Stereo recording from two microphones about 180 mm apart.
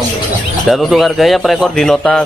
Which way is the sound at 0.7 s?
Centre (ahead or behind).